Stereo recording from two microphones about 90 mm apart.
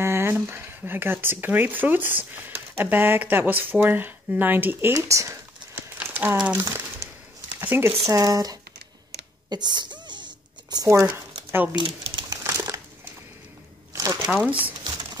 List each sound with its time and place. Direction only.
0.0 s speech: 30° right (ahead or behind)
4.9 s crumpling: 35° right (ahead or behind)
6.3 s speech: 15° right (ahead or behind)
7.6 s speech: 25° right (ahead or behind)
8.1 s speech: 40° right (ahead or behind)
9.5 s a sound: 50° right (ahead or behind)
10.9 s speech: 30° right (ahead or behind)
11.7 s a sound: 75° right (ahead or behind)
12.3 s crumpling: 40° right (ahead or behind)
13.9 s a sound: 40° right (ahead or behind)